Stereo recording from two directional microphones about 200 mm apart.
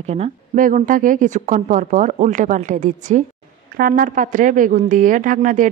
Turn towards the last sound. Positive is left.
turn(degrees=-40)  # may be behind; listen again after turning